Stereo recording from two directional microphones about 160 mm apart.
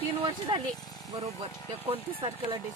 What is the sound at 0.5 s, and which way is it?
Speech, 30° right (ahead or behind).